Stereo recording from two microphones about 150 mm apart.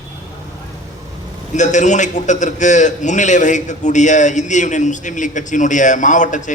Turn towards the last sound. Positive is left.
turn(degrees=55)  # may be behind; listen again after turning